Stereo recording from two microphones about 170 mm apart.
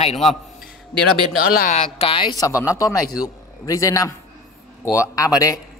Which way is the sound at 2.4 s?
20° left (ahead or behind).